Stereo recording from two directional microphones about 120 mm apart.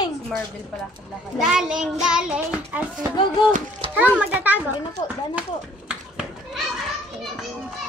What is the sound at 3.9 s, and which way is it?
Speech, 10° right (ahead or behind).